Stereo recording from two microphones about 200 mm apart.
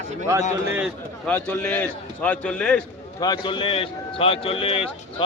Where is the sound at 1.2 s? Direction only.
5° left (ahead or behind).